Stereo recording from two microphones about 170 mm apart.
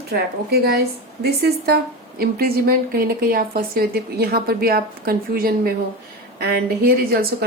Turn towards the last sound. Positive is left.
turn(degrees=-65)  # may be behind; listen again after turning